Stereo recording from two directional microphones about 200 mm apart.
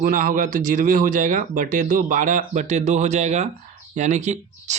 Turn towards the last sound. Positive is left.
turn(degrees=-35)  # may be behind; listen again after turning